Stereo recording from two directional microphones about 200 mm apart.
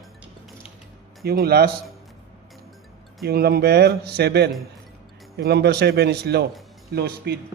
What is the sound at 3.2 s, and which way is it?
A man's voice, 50° right (ahead or behind).